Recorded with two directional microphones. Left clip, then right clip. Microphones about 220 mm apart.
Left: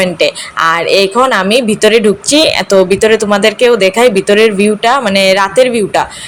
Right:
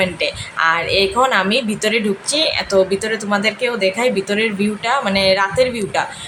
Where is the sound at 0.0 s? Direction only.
25° left (ahead or behind).